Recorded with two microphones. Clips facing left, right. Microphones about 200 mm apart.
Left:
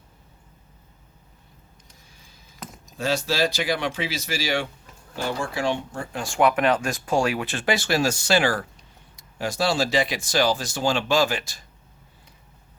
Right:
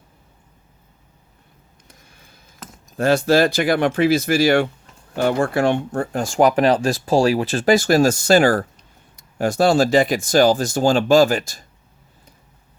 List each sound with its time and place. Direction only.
1.9 s a sound: 60° right (ahead or behind)
3.0 s speech: 55° right (ahead or behind)
6.2 s speech: 40° right (ahead or behind)